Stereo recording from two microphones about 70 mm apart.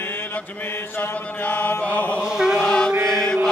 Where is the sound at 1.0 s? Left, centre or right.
Left.